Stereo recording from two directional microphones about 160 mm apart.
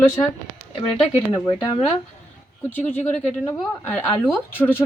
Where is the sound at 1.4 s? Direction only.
40° left (ahead or behind).